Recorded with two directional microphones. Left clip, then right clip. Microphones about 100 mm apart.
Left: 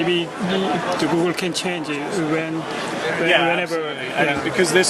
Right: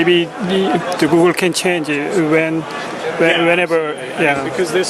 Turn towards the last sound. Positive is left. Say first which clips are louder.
# even
turn(degrees=25)  # may be behind; listen again after turning